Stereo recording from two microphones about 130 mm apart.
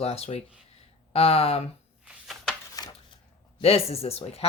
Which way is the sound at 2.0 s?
Centre (ahead or behind).